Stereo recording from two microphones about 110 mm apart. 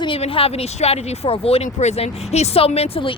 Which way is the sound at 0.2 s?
60° left (ahead or behind).